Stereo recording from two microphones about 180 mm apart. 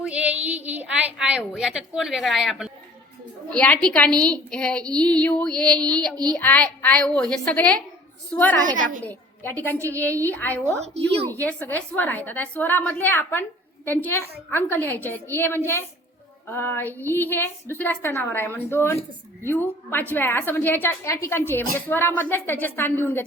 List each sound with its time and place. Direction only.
0.0 s a woman's voice: 5° right (ahead or behind); by 10.6 s 10° left (ahead or behind)
10.8 s a woman's voice: 35° right (ahead or behind)
11.4 s a woman's voice: 10° left (ahead or behind)